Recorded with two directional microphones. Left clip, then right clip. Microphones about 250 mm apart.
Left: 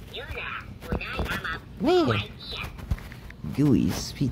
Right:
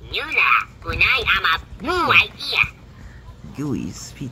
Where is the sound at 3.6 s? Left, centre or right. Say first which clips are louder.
Left 4 dB; centre.